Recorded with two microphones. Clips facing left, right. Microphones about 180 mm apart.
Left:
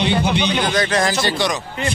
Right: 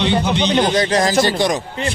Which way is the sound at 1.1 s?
45° right (ahead or behind).